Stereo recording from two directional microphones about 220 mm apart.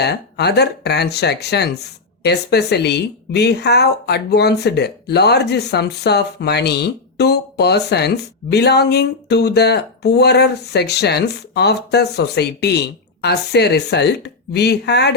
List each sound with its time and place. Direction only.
0.0 s speech: 50° left (ahead or behind)